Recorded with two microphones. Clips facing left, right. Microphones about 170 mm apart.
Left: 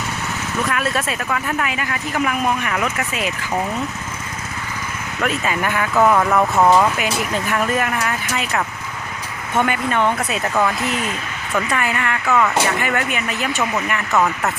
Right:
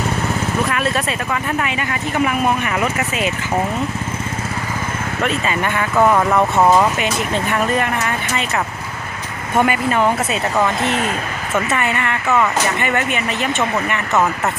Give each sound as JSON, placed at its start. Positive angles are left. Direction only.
{"t": 0.7, "sound": "speech", "side_deg": 0}
{"t": 5.2, "sound": "speech", "side_deg": 5}
{"t": 7.0, "sound": "speech", "side_deg": 5}
{"t": 9.6, "sound": "speech", "side_deg": -5}
{"t": 11.5, "sound": "speech", "side_deg": 0}